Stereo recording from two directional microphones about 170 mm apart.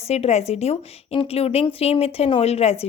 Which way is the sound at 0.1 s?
40° left (ahead or behind).